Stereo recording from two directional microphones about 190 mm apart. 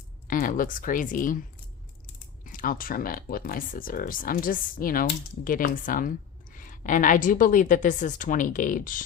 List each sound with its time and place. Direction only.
0.3 s speech: 45° left (ahead or behind)
2.4 s speech: 45° left (ahead or behind)